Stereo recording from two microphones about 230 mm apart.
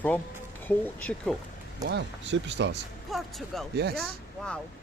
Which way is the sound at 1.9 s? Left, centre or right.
Right.